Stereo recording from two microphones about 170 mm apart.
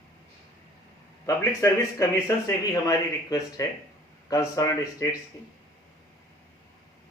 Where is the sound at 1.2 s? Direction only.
15° left (ahead or behind).